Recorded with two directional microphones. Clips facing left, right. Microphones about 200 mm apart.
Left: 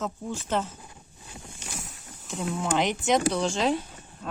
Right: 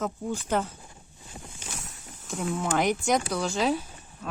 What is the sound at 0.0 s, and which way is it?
Speech, 10° right (ahead or behind).